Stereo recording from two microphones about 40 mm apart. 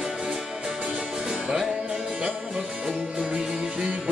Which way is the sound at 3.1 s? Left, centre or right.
Right.